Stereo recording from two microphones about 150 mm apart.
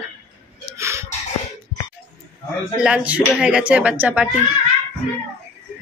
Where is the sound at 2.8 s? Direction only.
10° right (ahead or behind).